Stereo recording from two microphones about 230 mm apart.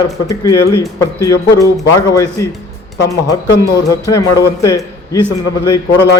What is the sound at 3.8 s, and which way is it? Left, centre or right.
Speech, centre.